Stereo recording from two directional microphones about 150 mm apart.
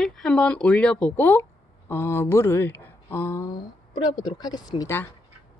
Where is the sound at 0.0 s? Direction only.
5° left (ahead or behind); by 4.9 s 25° left (ahead or behind).